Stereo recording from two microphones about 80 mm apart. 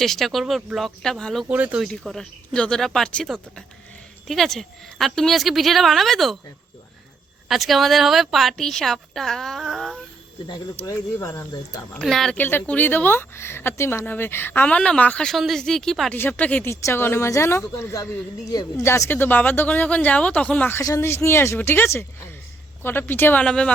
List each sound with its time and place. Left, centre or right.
0.0 s a woman's voice: centre
1.5 s speech: centre
1.9 s speech: centre
4.3 s a woman's voice: centre
7.4 s a woman's voice: centre
10.8 s speech: left
11.5 s speech: left
11.9 s a woman's voice: centre
12.4 s speech: left
15.3 s a woman's voice: centre
16.1 s speech: left
16.6 s speech: left; by 20.7 s centre
21.0 s speech: left
23.4 s speech: centre